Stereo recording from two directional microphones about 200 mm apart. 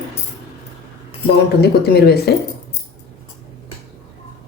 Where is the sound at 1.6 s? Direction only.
55° left (ahead or behind).